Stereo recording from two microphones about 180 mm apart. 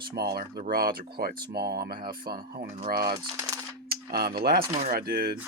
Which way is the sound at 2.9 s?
60° right (ahead or behind).